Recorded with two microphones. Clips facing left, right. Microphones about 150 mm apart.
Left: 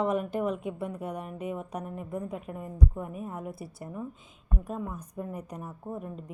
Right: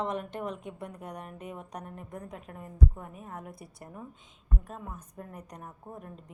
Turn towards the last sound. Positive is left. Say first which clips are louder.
# left 7 dB
turn(degrees=5)  # may be behind; listen again after turning